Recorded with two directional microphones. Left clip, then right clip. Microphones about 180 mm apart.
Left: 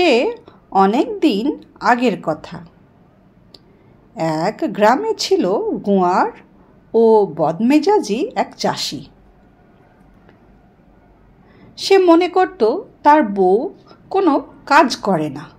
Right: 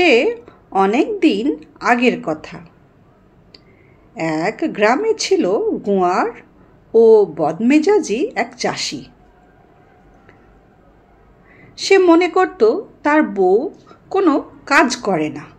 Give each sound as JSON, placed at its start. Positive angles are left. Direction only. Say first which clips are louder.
{"t": 0.0, "sound": "a woman's voice", "louder": "right 1 dB", "side_deg": 30}
{"t": 4.1, "sound": "a woman's voice", "louder": "left 1 dB", "side_deg": 30}
{"t": 11.7, "sound": "a woman's voice", "louder": "even", "side_deg": 25}